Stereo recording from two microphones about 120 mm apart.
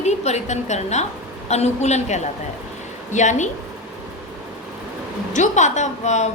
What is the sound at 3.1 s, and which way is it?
Speech, 85° left.